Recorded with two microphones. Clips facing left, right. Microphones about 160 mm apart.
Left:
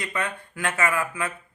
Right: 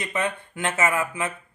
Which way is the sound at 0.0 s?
20° right (ahead or behind).